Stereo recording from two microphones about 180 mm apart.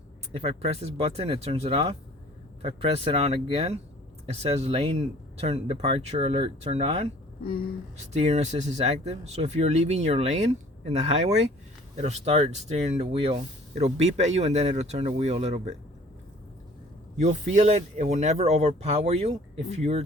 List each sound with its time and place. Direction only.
0.3 s speech: 35° right (ahead or behind)
17.2 s speech: 40° right (ahead or behind)